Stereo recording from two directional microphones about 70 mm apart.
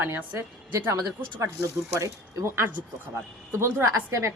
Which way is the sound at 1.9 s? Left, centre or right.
Right.